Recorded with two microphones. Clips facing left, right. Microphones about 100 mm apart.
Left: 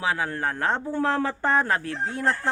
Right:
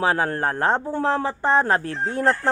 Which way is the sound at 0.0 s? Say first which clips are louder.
Right 5 dB; 40° right (ahead or behind).